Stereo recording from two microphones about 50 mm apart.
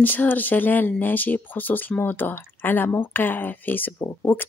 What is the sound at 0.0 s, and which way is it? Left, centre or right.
Speech, left.